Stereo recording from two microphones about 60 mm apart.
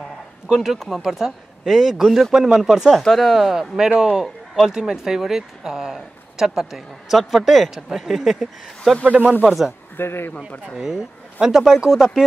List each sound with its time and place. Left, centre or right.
0.5 s speech: centre
9.0 s speech: right
9.5 s speech: centre
9.9 s speech: left
10.8 s speech: centre